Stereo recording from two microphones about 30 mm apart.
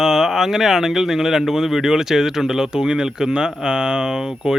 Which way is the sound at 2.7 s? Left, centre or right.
Right.